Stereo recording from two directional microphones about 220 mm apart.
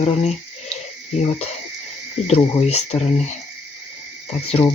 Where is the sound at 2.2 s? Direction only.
30° left (ahead or behind).